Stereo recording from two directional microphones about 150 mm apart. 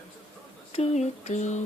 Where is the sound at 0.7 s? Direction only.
45° left (ahead or behind).